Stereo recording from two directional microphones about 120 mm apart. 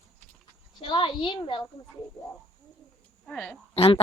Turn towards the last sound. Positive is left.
turn(degrees=55)  # may be behind; listen again after turning